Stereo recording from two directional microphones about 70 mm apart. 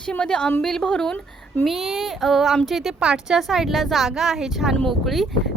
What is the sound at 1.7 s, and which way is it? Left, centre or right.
Speech, centre.